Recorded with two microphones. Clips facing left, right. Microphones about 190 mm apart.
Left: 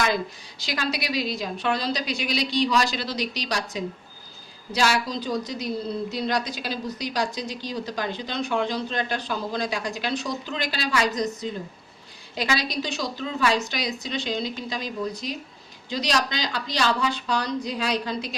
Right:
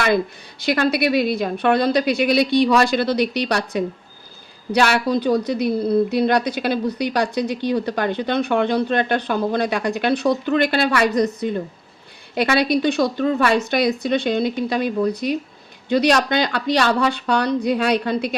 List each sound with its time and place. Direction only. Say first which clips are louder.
0.6 s a woman's voice: right 10 dB; 60° right (ahead or behind)